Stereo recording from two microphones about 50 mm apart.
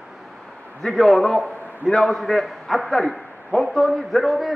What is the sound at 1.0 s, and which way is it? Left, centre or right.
A man's voice, centre.